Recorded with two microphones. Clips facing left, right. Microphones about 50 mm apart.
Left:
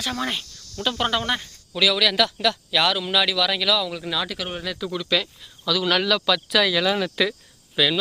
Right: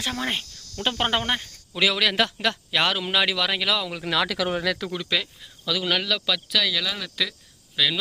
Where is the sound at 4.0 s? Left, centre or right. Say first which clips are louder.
Right 3 dB; right.